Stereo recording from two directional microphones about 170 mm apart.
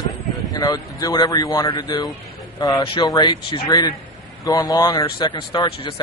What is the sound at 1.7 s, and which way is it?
Speech, 30° left (ahead or behind).